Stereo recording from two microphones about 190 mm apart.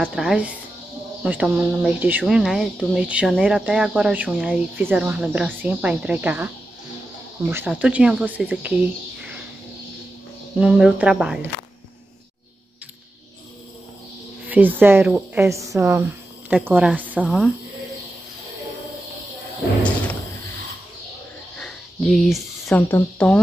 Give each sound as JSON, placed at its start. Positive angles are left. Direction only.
{"t": 0.0, "sound": "speech", "side_deg": -5}
{"t": 10.6, "sound": "speech", "side_deg": -5}
{"t": 14.5, "sound": "speech", "side_deg": -10}
{"t": 21.5, "sound": "speech", "side_deg": 0}